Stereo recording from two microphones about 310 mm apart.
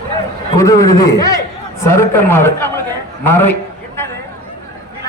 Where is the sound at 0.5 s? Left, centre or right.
Centre.